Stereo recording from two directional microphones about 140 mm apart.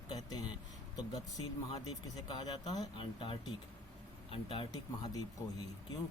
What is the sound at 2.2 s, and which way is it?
A man's voice, 30° left (ahead or behind).